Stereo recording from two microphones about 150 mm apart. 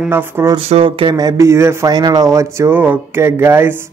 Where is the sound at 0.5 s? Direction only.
40° right (ahead or behind).